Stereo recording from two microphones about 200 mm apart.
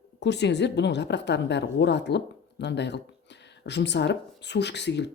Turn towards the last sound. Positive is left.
turn(degrees=60)  # may be behind; listen again after turning